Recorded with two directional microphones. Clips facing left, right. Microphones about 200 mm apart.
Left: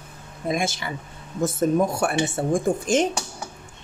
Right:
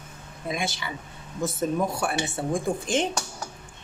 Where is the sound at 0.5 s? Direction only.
45° left (ahead or behind).